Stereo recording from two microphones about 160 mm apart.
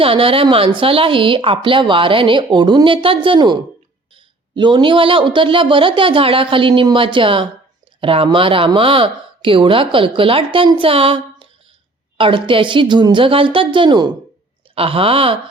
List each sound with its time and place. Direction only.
0.0 s speech: 35° right (ahead or behind)